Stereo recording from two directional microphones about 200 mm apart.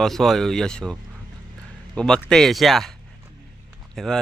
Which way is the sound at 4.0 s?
Centre (ahead or behind).